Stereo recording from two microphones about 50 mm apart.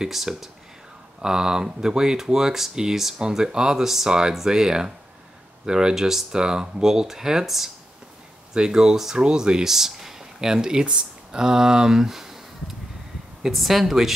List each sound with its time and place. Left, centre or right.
0.0 s speech: centre